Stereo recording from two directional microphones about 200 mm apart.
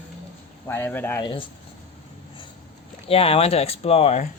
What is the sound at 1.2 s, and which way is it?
Speech, 25° left (ahead or behind).